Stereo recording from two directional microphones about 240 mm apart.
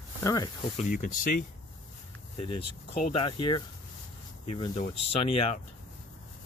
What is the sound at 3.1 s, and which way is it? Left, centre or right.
Speech, centre.